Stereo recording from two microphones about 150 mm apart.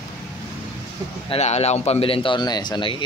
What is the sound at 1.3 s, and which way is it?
Speech, 45° left (ahead or behind).